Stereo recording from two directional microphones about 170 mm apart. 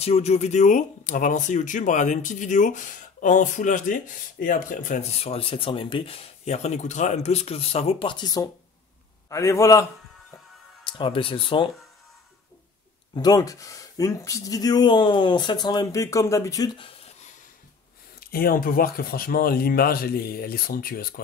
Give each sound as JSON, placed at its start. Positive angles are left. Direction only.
{"t": 0.0, "sound": "a man's voice", "side_deg": 40}
{"t": 10.8, "sound": "speech", "side_deg": 30}
{"t": 13.1, "sound": "speech", "side_deg": 25}
{"t": 18.2, "sound": "speech", "side_deg": 60}